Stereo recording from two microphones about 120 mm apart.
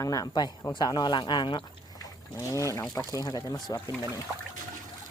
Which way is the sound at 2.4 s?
25° left (ahead or behind).